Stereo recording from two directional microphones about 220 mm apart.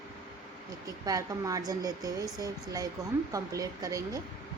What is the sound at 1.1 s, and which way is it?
A woman's voice, 15° right (ahead or behind).